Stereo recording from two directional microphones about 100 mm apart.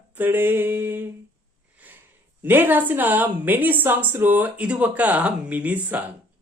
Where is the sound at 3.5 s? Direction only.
20° right (ahead or behind).